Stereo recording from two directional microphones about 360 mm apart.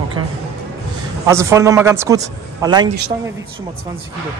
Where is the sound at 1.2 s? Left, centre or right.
Centre.